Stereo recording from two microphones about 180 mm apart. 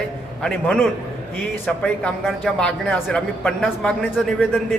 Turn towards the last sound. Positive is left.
turn(degrees=5)  # may be behind; listen again after turning